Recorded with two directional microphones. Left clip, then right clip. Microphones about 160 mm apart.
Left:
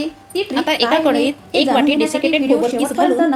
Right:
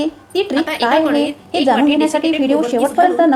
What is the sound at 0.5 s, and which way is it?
Speech, 35° left (ahead or behind).